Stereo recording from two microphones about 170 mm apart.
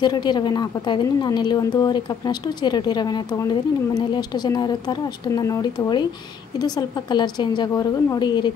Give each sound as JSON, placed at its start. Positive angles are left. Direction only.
{"t": 0.0, "sound": "a woman's voice", "side_deg": 25}